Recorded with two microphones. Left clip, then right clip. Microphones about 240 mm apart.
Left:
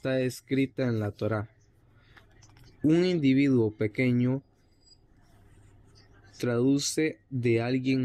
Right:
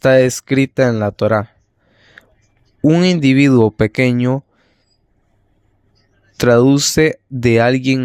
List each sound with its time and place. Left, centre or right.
0.0 s speech: right
2.8 s speech: right
6.3 s speech: right